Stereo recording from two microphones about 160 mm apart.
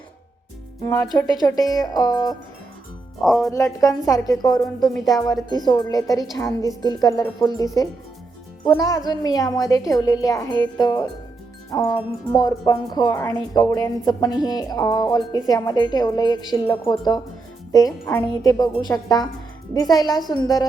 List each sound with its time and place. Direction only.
1.1 s speech: 25° left (ahead or behind)
3.2 s speech: centre (ahead or behind)
3.5 s speech: 20° left (ahead or behind)
8.7 s speech: 25° left (ahead or behind)